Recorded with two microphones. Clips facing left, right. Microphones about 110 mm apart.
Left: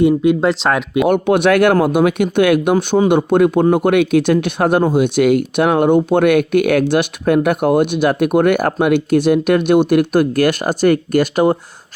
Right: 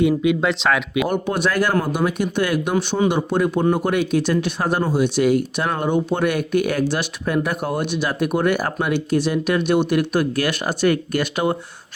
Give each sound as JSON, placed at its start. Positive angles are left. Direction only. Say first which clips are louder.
{"t": 0.4, "sound": "speech", "louder": "left 4 dB", "side_deg": 40}
{"t": 1.0, "sound": "speech", "louder": "left 8 dB", "side_deg": 65}